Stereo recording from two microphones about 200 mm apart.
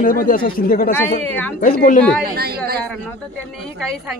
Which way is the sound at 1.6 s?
45° left (ahead or behind).